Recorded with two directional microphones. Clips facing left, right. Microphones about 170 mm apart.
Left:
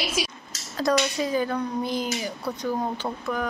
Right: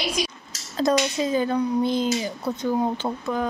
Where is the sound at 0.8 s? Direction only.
25° right (ahead or behind).